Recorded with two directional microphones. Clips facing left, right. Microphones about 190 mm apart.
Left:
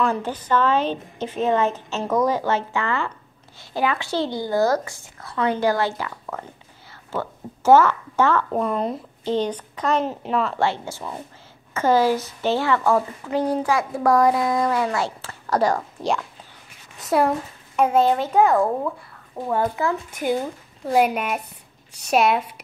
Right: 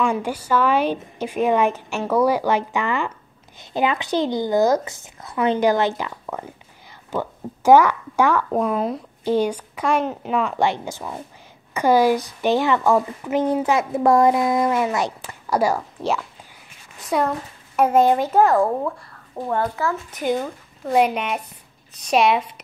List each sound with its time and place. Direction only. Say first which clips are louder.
0.0 s a woman's voice: right 1 dB; 10° right (ahead or behind)
17.7 s a child's voice: right 2 dB; 10° right (ahead or behind)
19.6 s a child's voice: left 3 dB; 15° left (ahead or behind)
20.8 s a child's voice: right 1 dB; 5° left (ahead or behind)